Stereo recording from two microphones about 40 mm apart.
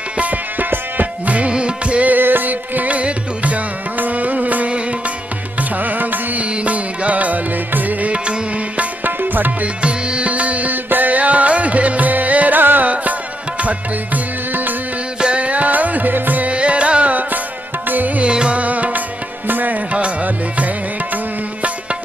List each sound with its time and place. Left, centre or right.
0.2 s music: right
2.0 s music: right
5.6 s music: right
6.5 s music: right
8.1 s music: right
9.0 s music: right
9.8 s music: right
13.6 s music: right
15.3 s music: right
16.5 s music: right
18.2 s music: right
18.6 s music: right
19.9 s music: right